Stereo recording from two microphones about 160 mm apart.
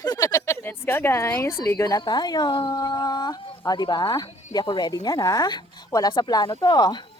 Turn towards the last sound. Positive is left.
turn(degrees=25)  # may be behind; listen again after turning